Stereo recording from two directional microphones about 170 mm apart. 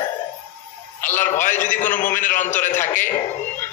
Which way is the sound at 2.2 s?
50° left (ahead or behind).